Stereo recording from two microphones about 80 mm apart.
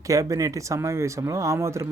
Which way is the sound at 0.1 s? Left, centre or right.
Right.